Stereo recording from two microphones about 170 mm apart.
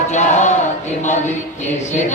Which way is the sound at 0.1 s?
45° left (ahead or behind).